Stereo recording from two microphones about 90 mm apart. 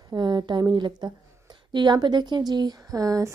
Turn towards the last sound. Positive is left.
turn(degrees=-35)  # may be behind; listen again after turning